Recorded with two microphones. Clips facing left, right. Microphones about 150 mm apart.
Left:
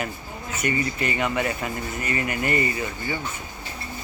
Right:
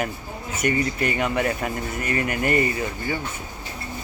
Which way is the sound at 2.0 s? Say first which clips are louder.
Right 2 dB; 50° right (ahead or behind).